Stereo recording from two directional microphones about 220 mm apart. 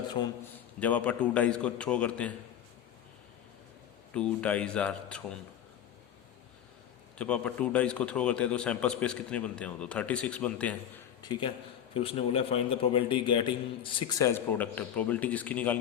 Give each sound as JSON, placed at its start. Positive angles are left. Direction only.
{"t": 0.8, "sound": "a man's voice", "side_deg": 5}
{"t": 4.1, "sound": "a man's voice", "side_deg": 5}
{"t": 7.2, "sound": "a man's voice", "side_deg": 5}
{"t": 11.2, "sound": "a man's voice", "side_deg": 20}